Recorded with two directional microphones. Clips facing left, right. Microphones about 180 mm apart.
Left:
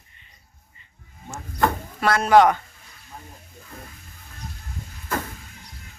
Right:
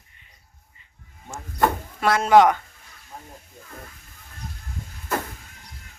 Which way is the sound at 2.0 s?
20° right (ahead or behind).